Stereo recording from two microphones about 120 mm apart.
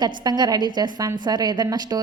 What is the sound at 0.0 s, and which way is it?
A woman's voice, 35° right (ahead or behind).